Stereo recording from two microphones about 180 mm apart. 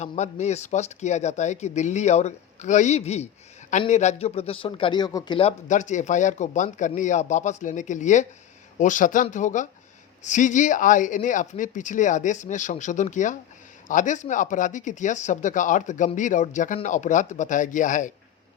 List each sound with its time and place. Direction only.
0.0 s a man's voice: 40° left (ahead or behind)